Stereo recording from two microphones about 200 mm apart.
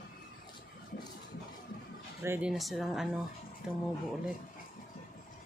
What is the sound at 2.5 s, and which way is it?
Speech, centre (ahead or behind).